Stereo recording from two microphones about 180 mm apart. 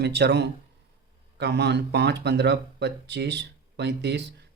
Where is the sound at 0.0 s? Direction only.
65° right (ahead or behind).